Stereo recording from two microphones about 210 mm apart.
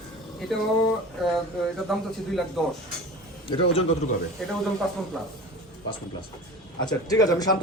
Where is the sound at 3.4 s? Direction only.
25° left (ahead or behind).